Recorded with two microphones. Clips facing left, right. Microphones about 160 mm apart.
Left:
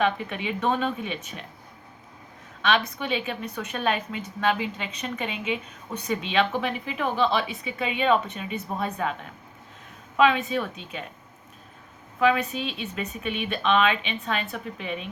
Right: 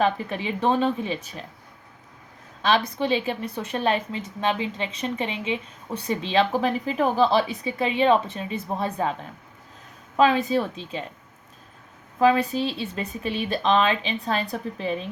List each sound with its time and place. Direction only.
0.0 s a woman's voice: 35° right (ahead or behind)
2.6 s a woman's voice: 35° right (ahead or behind)
10.2 s a woman's voice: 35° right (ahead or behind)
12.2 s a woman's voice: 35° right (ahead or behind)